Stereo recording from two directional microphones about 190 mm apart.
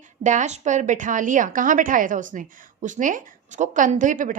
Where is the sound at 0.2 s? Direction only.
40° right (ahead or behind).